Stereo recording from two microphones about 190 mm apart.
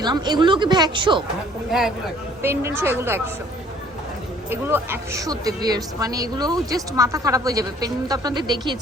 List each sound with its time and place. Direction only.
0.0 s speech: 25° right (ahead or behind)
2.4 s a woman's voice: 10° right (ahead or behind)
4.4 s speech: 10° right (ahead or behind)